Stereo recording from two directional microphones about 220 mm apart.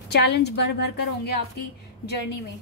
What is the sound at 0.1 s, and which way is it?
A woman's voice, 50° left (ahead or behind).